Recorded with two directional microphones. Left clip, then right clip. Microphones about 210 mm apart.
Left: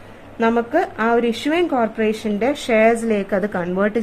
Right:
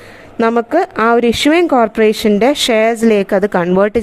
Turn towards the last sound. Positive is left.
turn(degrees=-50)  # may be behind; listen again after turning